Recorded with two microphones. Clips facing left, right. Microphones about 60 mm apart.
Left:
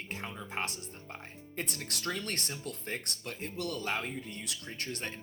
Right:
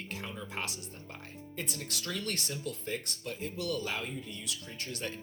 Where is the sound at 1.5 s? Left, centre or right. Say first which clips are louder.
Left 1 dB; left.